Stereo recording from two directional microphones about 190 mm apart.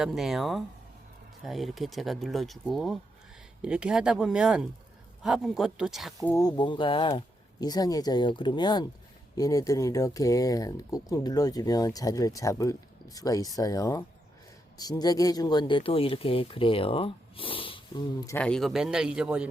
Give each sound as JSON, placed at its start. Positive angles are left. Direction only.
{"t": 0.0, "sound": "speech", "side_deg": 0}
{"t": 6.1, "sound": "speech", "side_deg": 15}
{"t": 18.3, "sound": "speech", "side_deg": 5}